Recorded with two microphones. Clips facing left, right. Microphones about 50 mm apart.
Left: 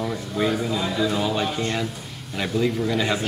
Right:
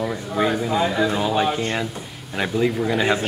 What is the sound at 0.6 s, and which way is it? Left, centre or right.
A man's voice, right.